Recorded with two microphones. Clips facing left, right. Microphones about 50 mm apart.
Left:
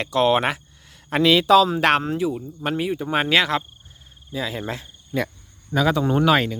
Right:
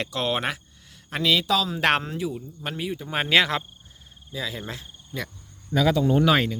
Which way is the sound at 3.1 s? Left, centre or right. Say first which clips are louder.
Left 1 dB; centre.